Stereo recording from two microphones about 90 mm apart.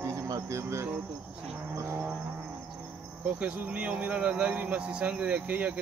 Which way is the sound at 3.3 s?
15° right (ahead or behind).